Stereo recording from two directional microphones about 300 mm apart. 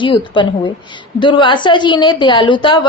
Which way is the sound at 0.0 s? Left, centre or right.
Centre.